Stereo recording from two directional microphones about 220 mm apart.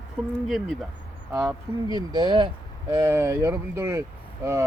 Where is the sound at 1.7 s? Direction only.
20° right (ahead or behind).